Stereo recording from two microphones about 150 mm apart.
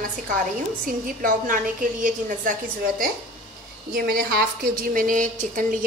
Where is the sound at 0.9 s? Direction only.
65° right (ahead or behind).